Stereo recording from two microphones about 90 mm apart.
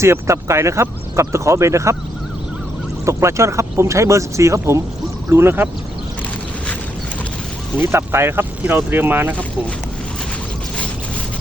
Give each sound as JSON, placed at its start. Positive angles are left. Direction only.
{"t": 0.0, "sound": "speech", "side_deg": -30}
{"t": 3.1, "sound": "speech", "side_deg": -30}
{"t": 7.8, "sound": "speech", "side_deg": -25}